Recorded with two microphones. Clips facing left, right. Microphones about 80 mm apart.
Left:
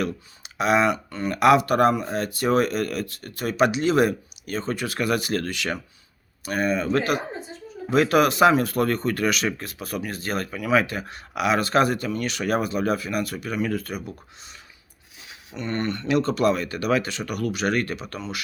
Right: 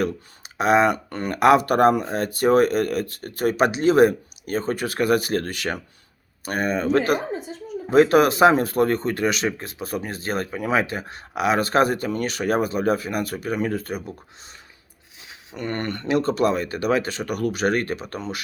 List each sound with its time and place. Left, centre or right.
0.0 s speech: right
15.5 s speech: right
16.0 s speech: right